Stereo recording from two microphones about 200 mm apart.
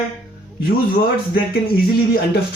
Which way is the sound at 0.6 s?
50° left (ahead or behind).